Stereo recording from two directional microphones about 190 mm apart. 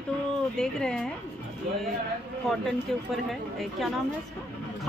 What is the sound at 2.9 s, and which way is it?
A woman's voice, centre (ahead or behind).